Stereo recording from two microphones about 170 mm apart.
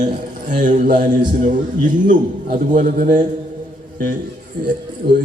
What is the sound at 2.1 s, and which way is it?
A man's voice, 50° right (ahead or behind).